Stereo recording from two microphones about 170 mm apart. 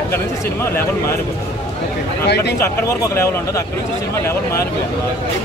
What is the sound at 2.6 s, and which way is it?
Speech, 15° left (ahead or behind).